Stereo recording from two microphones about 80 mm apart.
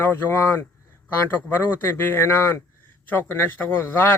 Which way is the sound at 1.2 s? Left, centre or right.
Left.